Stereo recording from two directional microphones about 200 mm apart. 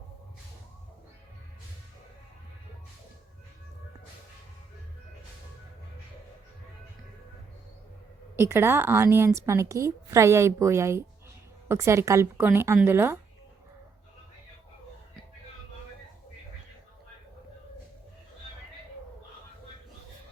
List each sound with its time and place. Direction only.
8.4 s a woman's voice: 10° right (ahead or behind)